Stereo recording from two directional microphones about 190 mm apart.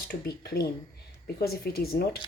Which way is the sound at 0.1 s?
55° left (ahead or behind).